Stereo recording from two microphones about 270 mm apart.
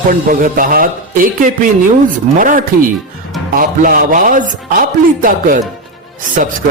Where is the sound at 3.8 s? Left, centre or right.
Right.